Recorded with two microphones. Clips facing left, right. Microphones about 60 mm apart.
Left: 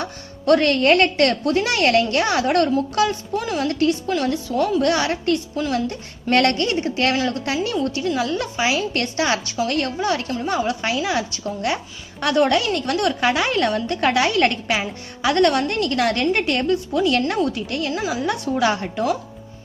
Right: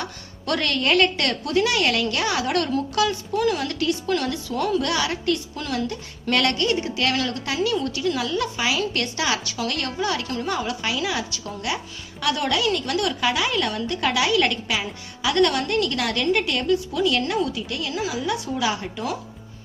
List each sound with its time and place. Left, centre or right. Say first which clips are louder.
0.0 s speech: left 7 dB; left
8.9 s speech: left 3 dB; left